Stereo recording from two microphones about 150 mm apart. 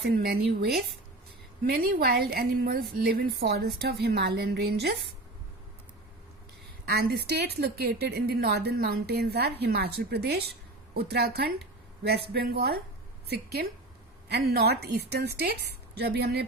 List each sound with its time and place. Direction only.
0.0 s a woman's voice: 90° right
1.6 s a woman's voice: 85° right
6.8 s a woman's voice: 90° right